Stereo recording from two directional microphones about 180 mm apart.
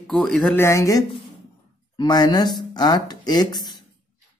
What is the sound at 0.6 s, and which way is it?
Speech, 15° left (ahead or behind).